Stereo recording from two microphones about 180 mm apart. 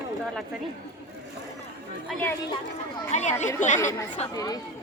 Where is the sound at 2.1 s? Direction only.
Centre (ahead or behind).